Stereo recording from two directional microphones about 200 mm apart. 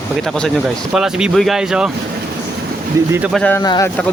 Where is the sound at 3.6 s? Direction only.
20° left (ahead or behind).